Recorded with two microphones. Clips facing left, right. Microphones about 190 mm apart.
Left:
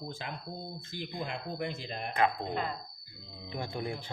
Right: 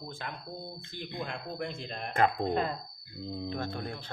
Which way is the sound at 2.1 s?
40° right (ahead or behind).